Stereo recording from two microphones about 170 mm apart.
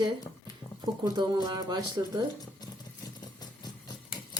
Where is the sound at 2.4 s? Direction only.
25° left (ahead or behind).